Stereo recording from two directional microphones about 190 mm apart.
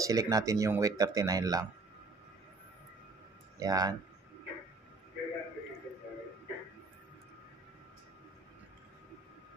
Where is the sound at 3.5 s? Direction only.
20° right (ahead or behind).